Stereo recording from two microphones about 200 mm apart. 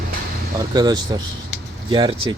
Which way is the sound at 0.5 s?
20° right (ahead or behind).